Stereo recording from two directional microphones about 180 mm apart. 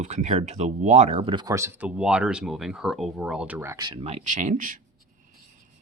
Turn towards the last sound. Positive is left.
turn(degrees=-45)  # may be behind; listen again after turning